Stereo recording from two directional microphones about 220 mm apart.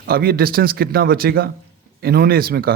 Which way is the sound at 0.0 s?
45° right (ahead or behind).